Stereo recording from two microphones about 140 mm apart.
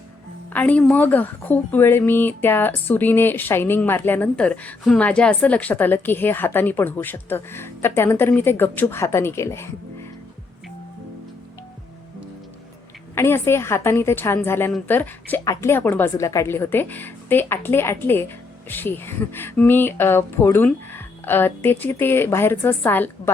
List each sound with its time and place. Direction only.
0.5 s speech: 10° left (ahead or behind)
13.1 s speech: 20° left (ahead or behind)